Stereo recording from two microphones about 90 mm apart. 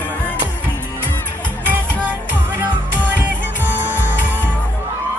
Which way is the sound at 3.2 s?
20° right (ahead or behind).